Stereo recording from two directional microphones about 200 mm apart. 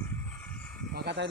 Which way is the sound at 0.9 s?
55° right (ahead or behind).